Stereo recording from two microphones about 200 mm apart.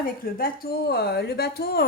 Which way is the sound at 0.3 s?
45° left (ahead or behind).